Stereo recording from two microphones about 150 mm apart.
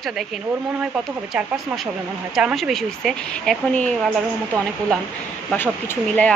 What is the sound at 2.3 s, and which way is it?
A woman's voice, centre (ahead or behind).